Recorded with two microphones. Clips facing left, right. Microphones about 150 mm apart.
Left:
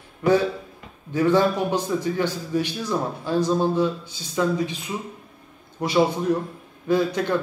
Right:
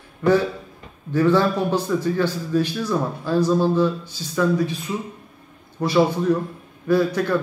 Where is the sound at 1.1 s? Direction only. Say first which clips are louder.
Right 1 dB; 15° left (ahead or behind).